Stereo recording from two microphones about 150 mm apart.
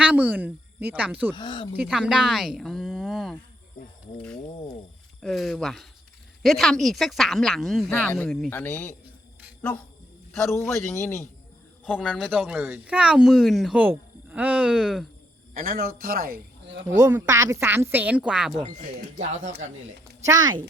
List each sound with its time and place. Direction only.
0.0 s speech: 10° right (ahead or behind)
1.4 s speech: 30° left (ahead or behind)
1.7 s speech: 5° right (ahead or behind)
5.2 s speech: centre (ahead or behind)
12.0 s speech: centre (ahead or behind)
15.5 s speech: 70° right (ahead or behind)
17.0 s speech: 15° right (ahead or behind)
19.2 s speech: 55° right (ahead or behind)
20.2 s speech: 25° right (ahead or behind)